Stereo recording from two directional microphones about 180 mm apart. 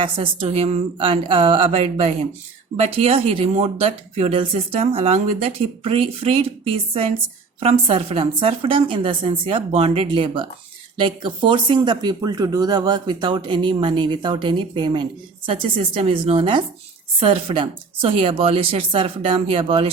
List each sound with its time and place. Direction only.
0.0 s a woman's voice: 30° right (ahead or behind)